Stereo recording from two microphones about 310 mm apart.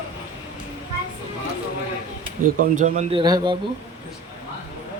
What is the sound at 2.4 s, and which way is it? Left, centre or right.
Speech, right.